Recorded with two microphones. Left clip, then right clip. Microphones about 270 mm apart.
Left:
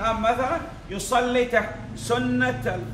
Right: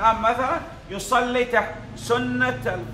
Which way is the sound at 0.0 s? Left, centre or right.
Centre.